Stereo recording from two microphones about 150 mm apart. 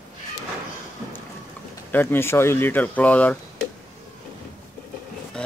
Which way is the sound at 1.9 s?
15° left (ahead or behind).